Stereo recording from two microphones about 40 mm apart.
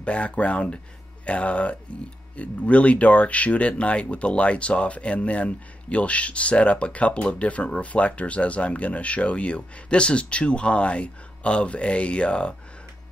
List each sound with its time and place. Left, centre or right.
0.0 s speech: left